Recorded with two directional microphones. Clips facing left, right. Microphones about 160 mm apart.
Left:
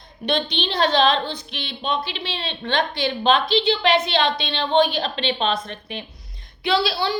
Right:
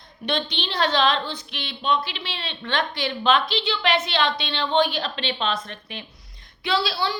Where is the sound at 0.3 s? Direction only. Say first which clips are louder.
Left 3 dB; 20° left (ahead or behind).